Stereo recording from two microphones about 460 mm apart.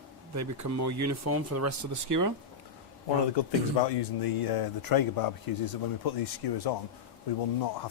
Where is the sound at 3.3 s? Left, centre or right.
Left.